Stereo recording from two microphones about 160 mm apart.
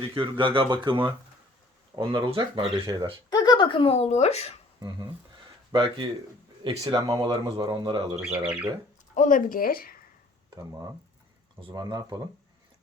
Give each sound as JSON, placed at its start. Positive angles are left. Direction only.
{"t": 0.1, "sound": "speech", "side_deg": -30}
{"t": 3.2, "sound": "speech", "side_deg": 25}
{"t": 5.7, "sound": "speech", "side_deg": -35}
{"t": 8.2, "sound": "speech", "side_deg": -5}
{"t": 9.1, "sound": "speech", "side_deg": 55}
{"t": 10.5, "sound": "speech", "side_deg": -20}